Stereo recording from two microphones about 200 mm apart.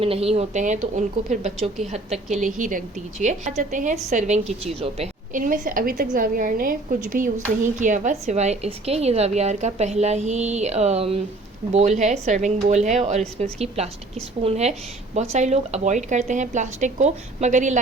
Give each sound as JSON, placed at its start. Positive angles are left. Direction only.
{"t": 0.0, "sound": "a woman's voice", "side_deg": -30}
{"t": 5.4, "sound": "a woman's voice", "side_deg": -45}